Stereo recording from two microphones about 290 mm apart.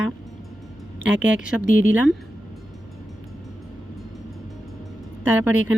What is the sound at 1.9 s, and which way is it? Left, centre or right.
Speech, centre.